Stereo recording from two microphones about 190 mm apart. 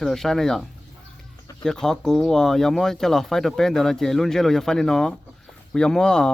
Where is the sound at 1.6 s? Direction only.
5° left (ahead or behind).